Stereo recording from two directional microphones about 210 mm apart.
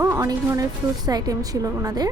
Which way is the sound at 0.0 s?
15° right (ahead or behind).